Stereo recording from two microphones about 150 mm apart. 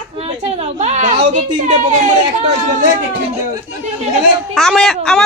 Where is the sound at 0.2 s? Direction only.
45° right (ahead or behind).